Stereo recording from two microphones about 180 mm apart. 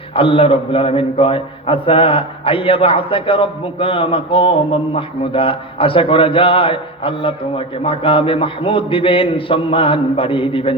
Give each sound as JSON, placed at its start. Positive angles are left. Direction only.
{"t": 0.2, "sound": "a man's voice", "side_deg": 30}